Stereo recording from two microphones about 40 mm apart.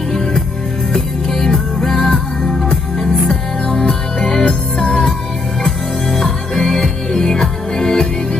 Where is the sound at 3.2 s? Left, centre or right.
Centre.